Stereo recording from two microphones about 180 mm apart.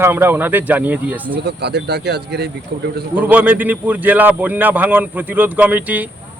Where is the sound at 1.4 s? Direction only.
65° right (ahead or behind).